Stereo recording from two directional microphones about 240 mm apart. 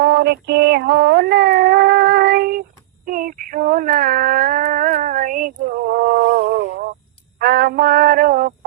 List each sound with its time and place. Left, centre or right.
0.0 s female singing: right
7.3 s music: right